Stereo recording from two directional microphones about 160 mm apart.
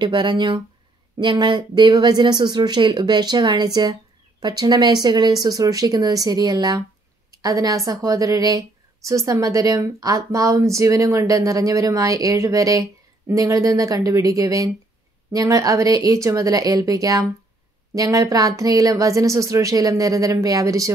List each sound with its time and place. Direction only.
0.0 s a woman's voice: 30° right (ahead or behind)